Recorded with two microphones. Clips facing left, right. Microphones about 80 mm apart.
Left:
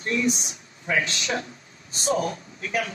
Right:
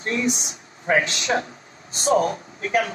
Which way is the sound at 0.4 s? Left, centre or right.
Right.